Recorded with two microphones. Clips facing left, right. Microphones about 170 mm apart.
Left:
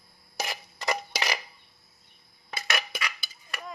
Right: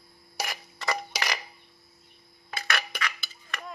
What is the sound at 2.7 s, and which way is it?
Cutlery, 15° left (ahead or behind).